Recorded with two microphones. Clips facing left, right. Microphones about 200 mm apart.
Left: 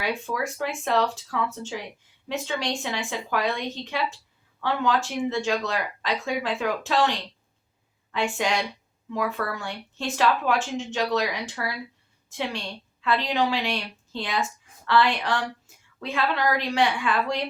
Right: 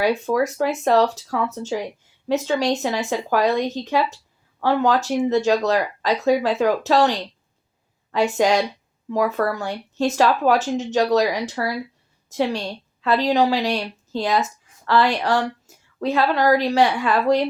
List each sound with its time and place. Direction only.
0.0 s a woman's voice: 40° right (ahead or behind)